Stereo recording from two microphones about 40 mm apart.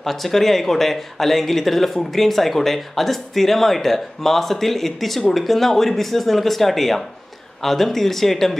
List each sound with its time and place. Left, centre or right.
0.0 s speech: centre